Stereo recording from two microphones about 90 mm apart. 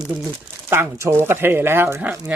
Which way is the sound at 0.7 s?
30° right (ahead or behind).